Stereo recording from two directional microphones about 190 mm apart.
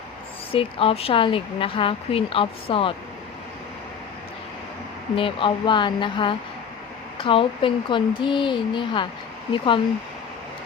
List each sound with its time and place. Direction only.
0.5 s speech: 30° left (ahead or behind)
5.1 s speech: 25° left (ahead or behind)